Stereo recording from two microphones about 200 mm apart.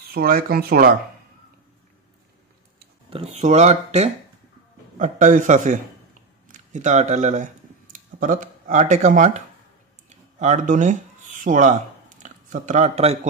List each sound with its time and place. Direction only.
0.1 s speech: 45° right (ahead or behind)
3.1 s speech: 30° right (ahead or behind)
10.0 s a sound: 35° right (ahead or behind)